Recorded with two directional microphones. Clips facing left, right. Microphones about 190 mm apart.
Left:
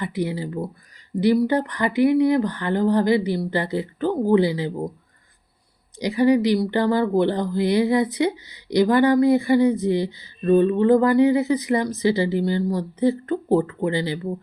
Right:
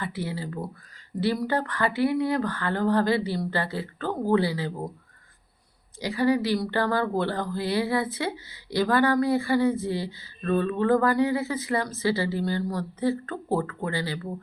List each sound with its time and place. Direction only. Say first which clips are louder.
0.0 s speech: left 6 dB; 15° left (ahead or behind)
6.0 s speech: left 6 dB; 15° left (ahead or behind)